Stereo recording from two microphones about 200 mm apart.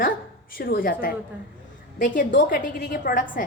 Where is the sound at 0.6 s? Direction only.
45° left (ahead or behind).